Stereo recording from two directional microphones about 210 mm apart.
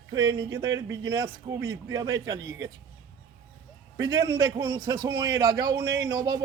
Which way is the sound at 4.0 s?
15° right (ahead or behind).